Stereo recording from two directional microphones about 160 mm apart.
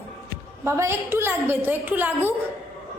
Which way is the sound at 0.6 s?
15° right (ahead or behind).